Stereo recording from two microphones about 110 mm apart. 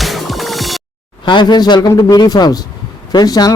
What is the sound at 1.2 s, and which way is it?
Speech, 45° left (ahead or behind).